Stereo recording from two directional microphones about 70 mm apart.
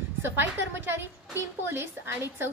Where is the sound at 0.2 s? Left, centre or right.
Right.